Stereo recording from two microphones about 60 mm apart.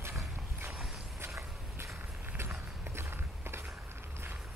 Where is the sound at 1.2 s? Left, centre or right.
Right.